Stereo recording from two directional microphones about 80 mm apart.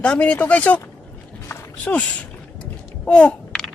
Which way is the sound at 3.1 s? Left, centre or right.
Centre.